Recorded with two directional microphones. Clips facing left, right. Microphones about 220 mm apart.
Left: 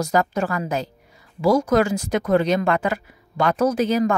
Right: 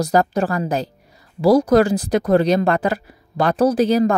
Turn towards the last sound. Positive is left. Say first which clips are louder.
# right 4 dB
turn(degrees=-35)  # may be behind; listen again after turning